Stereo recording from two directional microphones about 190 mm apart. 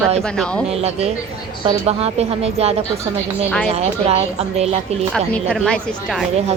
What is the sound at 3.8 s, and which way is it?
A woman's voice, 35° right (ahead or behind).